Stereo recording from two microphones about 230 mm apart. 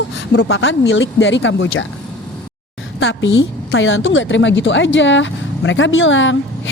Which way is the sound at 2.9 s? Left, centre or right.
Left.